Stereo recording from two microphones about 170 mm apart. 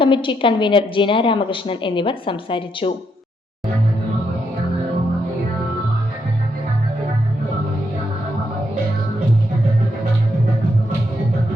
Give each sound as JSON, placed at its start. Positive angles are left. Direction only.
{"t": 0.0, "sound": "a woman's voice", "side_deg": 30}